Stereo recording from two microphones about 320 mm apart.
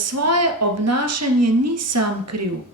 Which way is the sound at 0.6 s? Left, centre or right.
Right.